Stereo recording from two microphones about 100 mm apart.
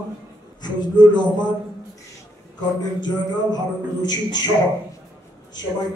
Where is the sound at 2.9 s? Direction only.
45° left (ahead or behind).